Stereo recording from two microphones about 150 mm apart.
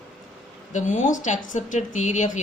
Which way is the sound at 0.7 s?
55° left (ahead or behind).